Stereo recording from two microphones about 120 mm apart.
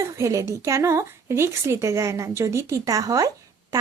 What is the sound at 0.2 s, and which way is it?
Speech, 25° right (ahead or behind).